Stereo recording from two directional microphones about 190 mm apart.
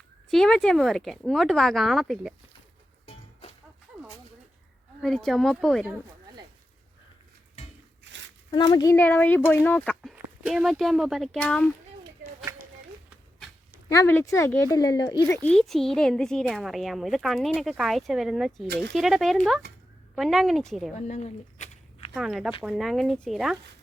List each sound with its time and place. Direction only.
0.3 s speech: centre (ahead or behind)
5.0 s speech: centre (ahead or behind)
8.4 s speech: 25° left (ahead or behind); by 11.7 s 5° left (ahead or behind)
13.9 s speech: 15° left (ahead or behind)
15.4 s speech: centre (ahead or behind)
20.9 s a sound: 35° left (ahead or behind)
22.1 s speech: centre (ahead or behind)